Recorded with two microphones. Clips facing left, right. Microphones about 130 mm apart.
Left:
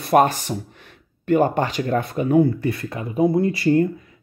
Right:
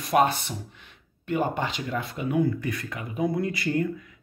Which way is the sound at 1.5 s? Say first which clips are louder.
Left 8 dB; 50° left (ahead or behind).